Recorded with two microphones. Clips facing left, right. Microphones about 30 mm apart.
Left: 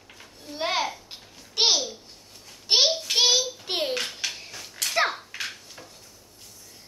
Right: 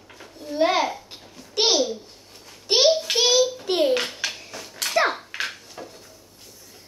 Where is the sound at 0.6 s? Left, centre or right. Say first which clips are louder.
Right 6 dB; centre.